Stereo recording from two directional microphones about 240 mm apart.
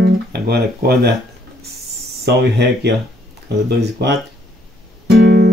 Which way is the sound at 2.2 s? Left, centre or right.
Right.